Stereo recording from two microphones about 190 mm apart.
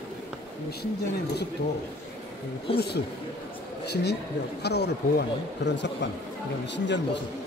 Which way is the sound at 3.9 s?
60° left (ahead or behind).